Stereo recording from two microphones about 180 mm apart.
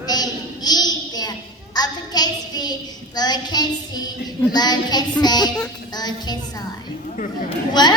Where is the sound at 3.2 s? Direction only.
25° left (ahead or behind).